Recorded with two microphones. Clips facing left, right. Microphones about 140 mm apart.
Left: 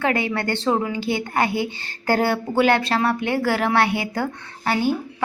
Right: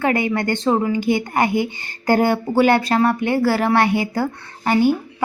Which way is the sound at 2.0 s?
15° right (ahead or behind).